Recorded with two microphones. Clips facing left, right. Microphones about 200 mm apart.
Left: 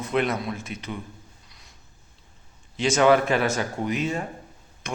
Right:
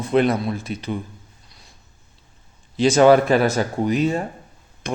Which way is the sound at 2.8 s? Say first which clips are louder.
Right 6 dB; 35° right (ahead or behind).